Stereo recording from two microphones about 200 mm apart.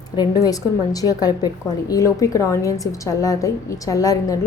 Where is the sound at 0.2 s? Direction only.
20° left (ahead or behind).